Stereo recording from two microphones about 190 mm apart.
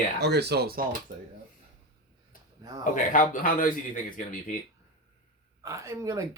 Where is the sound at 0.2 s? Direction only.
60° right (ahead or behind).